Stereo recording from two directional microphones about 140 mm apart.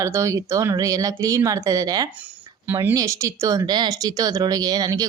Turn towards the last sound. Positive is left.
turn(degrees=-25)  # may be behind; listen again after turning